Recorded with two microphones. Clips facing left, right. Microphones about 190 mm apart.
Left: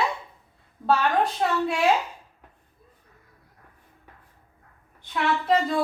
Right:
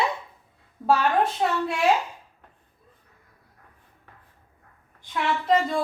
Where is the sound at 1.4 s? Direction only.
Centre (ahead or behind).